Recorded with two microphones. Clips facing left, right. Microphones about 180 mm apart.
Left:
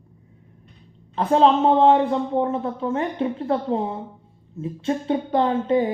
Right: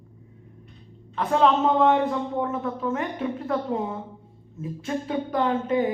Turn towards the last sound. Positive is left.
turn(degrees=30)  # may be behind; listen again after turning